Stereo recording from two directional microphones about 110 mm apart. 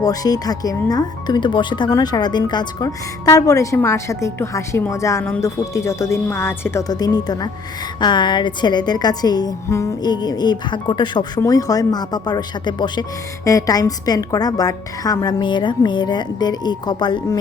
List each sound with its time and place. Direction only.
0.0 s speech: 35° left (ahead or behind)
6.8 s speech: 35° left (ahead or behind)
9.6 s speech: 25° left (ahead or behind)
10.0 s speech: 40° left (ahead or behind)
11.3 s speech: 35° left (ahead or behind)
13.4 s speech: 30° left (ahead or behind)